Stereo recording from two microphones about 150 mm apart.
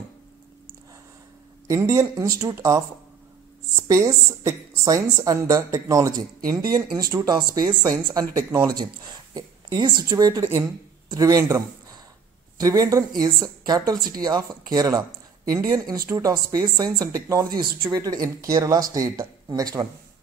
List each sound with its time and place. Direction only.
1.7 s speech: 20° right (ahead or behind)
3.8 s speech: 20° right (ahead or behind)